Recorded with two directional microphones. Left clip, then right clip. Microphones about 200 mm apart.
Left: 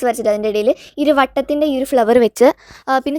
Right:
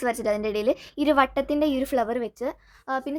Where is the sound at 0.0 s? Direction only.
25° left (ahead or behind).